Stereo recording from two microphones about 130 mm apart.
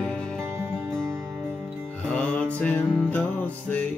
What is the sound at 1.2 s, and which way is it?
Music, 20° right (ahead or behind).